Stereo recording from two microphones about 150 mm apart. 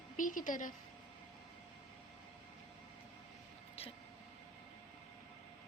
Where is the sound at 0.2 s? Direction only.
60° left (ahead or behind).